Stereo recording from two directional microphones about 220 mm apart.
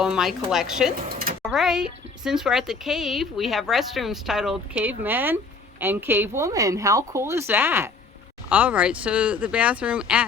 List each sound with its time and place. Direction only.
0.0 s a woman's voice: centre (ahead or behind)
1.1 s a sound: 40° right (ahead or behind)
1.4 s a woman's voice: 5° right (ahead or behind)